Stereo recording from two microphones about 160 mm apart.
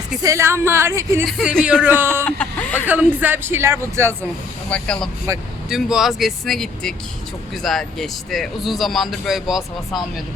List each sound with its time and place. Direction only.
0.2 s speech: 20° right (ahead or behind)
1.2 s speech: centre (ahead or behind)
2.2 s vehicle: 10° left (ahead or behind)
2.8 s speech: 10° right (ahead or behind)
4.7 s speech: 5° left (ahead or behind)
5.3 s speech: 20° right (ahead or behind)
5.6 s speech: 5° right (ahead or behind)